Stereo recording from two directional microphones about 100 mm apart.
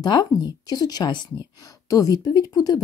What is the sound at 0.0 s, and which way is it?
A woman's voice, 45° left (ahead or behind).